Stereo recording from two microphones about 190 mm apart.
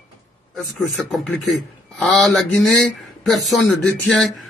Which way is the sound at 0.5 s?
Centre (ahead or behind).